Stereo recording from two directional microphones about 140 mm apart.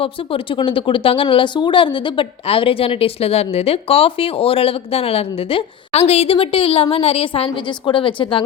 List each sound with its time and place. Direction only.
0.0 s speech: 40° left (ahead or behind)